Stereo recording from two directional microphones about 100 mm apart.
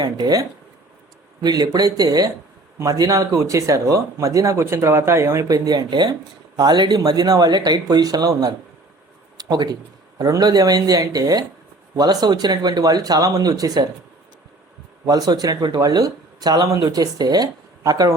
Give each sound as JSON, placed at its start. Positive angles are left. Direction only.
{"t": 0.0, "sound": "speech", "side_deg": -40}
{"t": 5.5, "sound": "speech", "side_deg": -40}
{"t": 15.0, "sound": "speech", "side_deg": -40}